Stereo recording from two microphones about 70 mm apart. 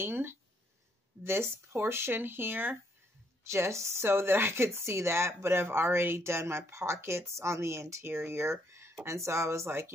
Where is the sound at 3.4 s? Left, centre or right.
Right.